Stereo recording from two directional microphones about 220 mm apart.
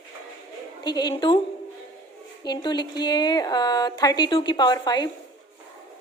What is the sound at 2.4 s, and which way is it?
A woman's voice, 20° left (ahead or behind).